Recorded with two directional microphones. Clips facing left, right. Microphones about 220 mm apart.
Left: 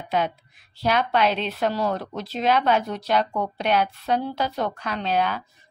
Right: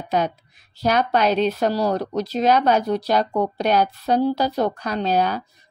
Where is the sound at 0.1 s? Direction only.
40° right (ahead or behind).